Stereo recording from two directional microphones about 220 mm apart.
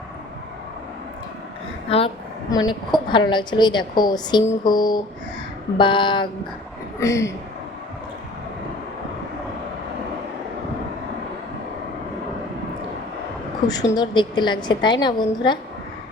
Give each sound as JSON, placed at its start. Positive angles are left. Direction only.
{"t": 2.5, "sound": "a woman's voice", "side_deg": 15}
{"t": 13.7, "sound": "a woman's voice", "side_deg": 20}